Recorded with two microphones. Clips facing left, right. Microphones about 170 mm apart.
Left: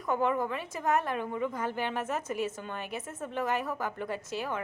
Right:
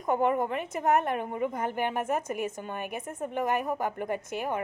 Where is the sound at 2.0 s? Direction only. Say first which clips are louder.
Right 2 dB; 50° right (ahead or behind).